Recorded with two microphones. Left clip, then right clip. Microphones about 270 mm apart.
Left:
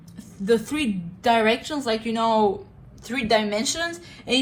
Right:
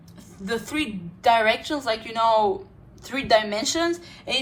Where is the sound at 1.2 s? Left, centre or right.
Right.